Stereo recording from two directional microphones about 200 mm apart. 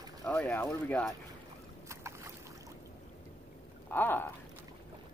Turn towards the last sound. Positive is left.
turn(degrees=10)  # may be behind; listen again after turning